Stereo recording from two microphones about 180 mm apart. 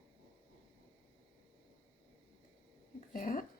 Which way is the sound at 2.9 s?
50° left (ahead or behind).